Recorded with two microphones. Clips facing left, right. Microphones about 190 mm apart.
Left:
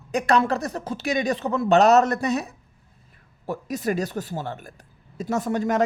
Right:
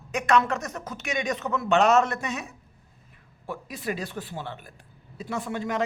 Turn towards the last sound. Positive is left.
turn(degrees=45)  # may be behind; listen again after turning